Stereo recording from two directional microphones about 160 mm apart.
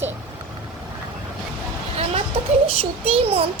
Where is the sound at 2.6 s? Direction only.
35° right (ahead or behind).